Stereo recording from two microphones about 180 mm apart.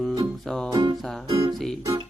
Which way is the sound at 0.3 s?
5° left (ahead or behind).